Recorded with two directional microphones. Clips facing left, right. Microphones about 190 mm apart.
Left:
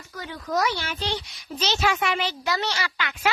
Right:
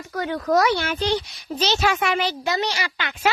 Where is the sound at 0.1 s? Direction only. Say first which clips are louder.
Right 8 dB; 65° right (ahead or behind); by 1.1 s 50° right (ahead or behind).